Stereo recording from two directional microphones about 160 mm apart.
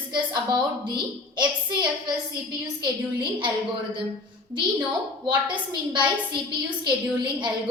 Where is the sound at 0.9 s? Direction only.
30° right (ahead or behind).